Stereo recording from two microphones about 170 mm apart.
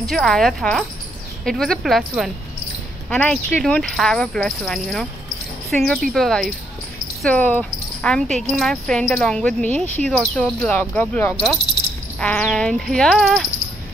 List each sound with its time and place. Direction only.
0.1 s speech: centre (ahead or behind)